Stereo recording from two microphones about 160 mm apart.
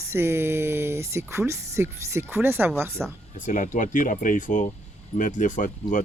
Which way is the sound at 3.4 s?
55° left (ahead or behind).